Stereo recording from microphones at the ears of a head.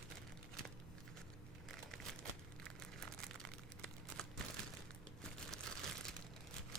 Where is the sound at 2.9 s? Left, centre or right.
Right.